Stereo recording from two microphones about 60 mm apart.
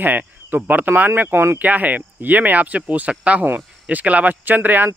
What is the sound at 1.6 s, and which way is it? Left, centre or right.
Speech, right.